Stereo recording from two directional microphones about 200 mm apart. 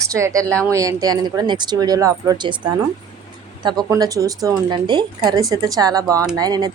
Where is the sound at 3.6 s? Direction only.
20° right (ahead or behind).